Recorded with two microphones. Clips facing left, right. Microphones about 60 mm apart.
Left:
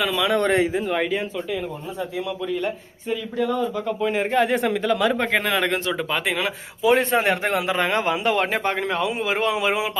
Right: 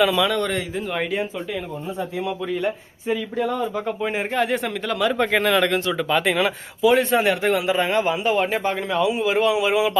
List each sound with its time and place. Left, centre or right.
0.0 s speech: centre
0.3 s a man's voice: left
0.9 s speech: centre
2.0 s a man's voice: right
2.5 s speech: centre
3.3 s a man's voice: right
4.3 s speech: centre
6.8 s a man's voice: left